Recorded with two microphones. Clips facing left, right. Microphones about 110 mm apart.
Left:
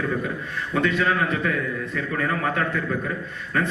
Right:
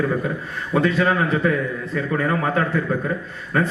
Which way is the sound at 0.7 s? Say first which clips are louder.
Right 3 dB; 35° right (ahead or behind).